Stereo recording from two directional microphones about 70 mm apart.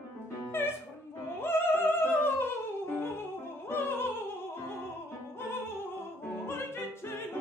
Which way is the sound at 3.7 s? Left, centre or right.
Left.